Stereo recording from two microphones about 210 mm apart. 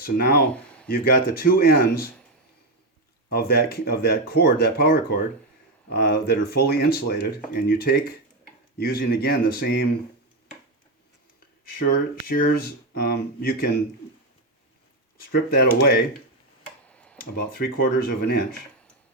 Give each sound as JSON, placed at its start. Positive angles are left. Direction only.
{"t": 0.0, "sound": "speech", "side_deg": 45}
{"t": 3.2, "sound": "speech", "side_deg": 45}
{"t": 11.9, "sound": "speech", "side_deg": 45}
{"t": 15.3, "sound": "speech", "side_deg": 50}
{"t": 16.9, "sound": "tick-tock", "side_deg": 5}
{"t": 17.2, "sound": "speech", "side_deg": 45}